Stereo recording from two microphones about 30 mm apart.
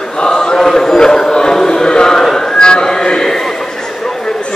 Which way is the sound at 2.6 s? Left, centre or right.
Left.